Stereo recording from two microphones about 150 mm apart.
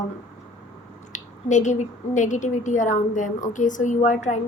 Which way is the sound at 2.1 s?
55° left (ahead or behind).